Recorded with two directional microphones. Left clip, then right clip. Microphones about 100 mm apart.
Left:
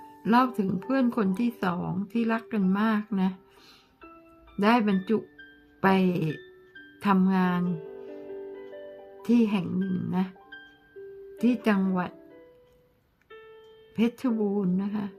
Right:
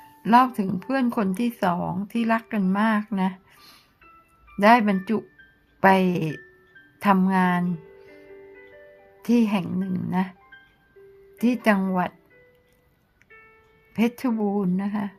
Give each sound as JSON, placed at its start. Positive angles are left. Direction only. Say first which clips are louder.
{"t": 0.2, "sound": "speech", "louder": "right 6 dB", "side_deg": -40}
{"t": 2.6, "sound": "speech", "louder": "right 3 dB", "side_deg": -35}
{"t": 2.8, "sound": "speech", "louder": "right 4 dB", "side_deg": -45}
{"t": 9.2, "sound": "speech", "louder": "right 3 dB", "side_deg": -45}
{"t": 11.3, "sound": "speech", "louder": "right 4 dB", "side_deg": -45}
{"t": 13.9, "sound": "speech", "louder": "right 3 dB", "side_deg": -50}